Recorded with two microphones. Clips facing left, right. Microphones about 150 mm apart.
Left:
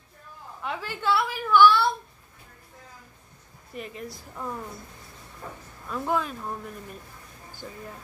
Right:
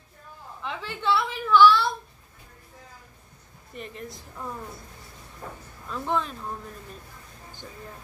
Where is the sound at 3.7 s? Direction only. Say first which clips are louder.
Left 1 dB; 5° left (ahead or behind).